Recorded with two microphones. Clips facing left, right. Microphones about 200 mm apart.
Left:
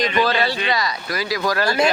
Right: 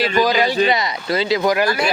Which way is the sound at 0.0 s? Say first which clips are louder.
Right 2 dB; 35° right (ahead or behind).